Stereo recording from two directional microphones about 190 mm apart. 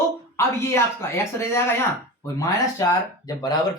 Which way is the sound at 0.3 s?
15° left (ahead or behind).